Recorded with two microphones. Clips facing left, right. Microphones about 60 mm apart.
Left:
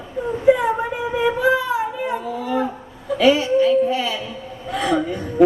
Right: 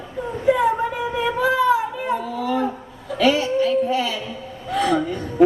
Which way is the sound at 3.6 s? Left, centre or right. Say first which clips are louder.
Left 2 dB; centre.